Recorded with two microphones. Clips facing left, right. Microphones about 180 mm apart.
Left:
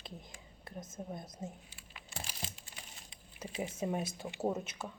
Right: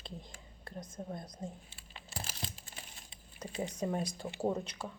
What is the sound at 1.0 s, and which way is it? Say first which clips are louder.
Speech: right 1 dB; 10° left (ahead or behind).